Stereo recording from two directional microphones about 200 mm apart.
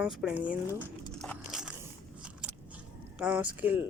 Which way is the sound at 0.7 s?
15° left (ahead or behind).